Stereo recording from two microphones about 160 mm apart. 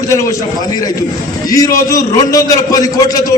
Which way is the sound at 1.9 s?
20° left (ahead or behind).